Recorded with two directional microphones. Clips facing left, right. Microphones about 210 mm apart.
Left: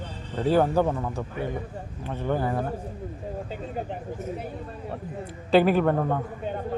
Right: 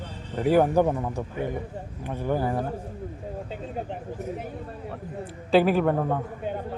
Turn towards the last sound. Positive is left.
turn(degrees=-5)  # may be behind; listen again after turning